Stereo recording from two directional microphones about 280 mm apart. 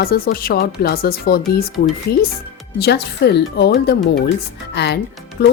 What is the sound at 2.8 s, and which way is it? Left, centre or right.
Speech, left.